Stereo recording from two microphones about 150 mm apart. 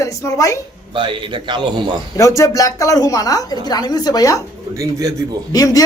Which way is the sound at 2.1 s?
20° left (ahead or behind).